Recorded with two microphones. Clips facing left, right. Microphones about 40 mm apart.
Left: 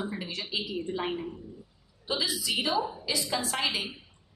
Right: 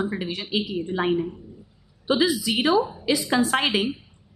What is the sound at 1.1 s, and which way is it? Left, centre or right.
Speech, centre.